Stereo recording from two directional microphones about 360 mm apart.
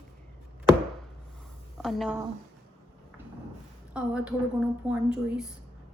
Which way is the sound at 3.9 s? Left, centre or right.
Centre.